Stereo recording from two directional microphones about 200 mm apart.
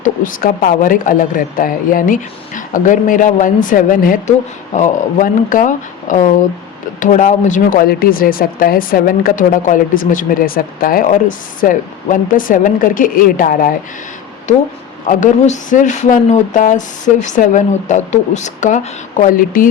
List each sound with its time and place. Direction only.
0.0 s a woman's voice: 40° left (ahead or behind)